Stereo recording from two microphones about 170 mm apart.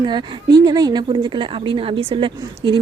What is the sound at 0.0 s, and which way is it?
A woman's voice, 25° right (ahead or behind).